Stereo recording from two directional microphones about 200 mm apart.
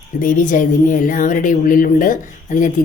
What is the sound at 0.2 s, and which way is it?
A woman's voice, 40° left (ahead or behind).